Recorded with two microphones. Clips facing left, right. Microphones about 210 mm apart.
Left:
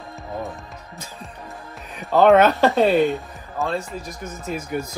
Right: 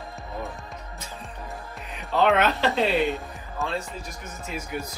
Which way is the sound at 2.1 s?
45° left (ahead or behind).